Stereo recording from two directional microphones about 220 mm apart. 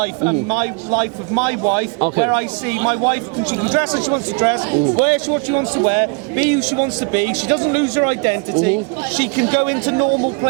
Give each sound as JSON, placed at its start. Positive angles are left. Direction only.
{"t": 0.0, "sound": "a man's voice", "side_deg": -15}
{"t": 6.3, "sound": "a man's voice", "side_deg": -10}
{"t": 7.4, "sound": "a man's voice", "side_deg": -25}